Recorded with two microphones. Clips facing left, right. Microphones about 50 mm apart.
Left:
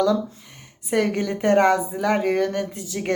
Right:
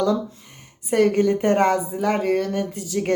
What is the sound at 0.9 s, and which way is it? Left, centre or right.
Speech, left.